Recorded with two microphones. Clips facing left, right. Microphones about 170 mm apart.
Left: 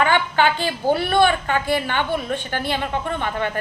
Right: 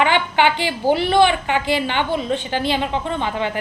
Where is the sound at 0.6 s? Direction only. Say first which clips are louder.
Right 2 dB; 15° right (ahead or behind).